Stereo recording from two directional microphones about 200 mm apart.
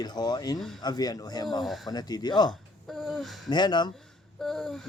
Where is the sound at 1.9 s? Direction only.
20° left (ahead or behind).